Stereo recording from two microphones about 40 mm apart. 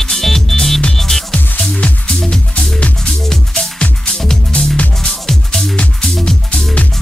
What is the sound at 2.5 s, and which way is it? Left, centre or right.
Music, left.